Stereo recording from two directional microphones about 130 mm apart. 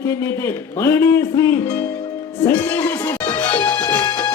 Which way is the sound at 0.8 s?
20° left (ahead or behind).